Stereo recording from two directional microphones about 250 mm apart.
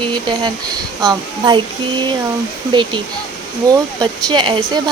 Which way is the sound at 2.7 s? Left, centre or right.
Centre.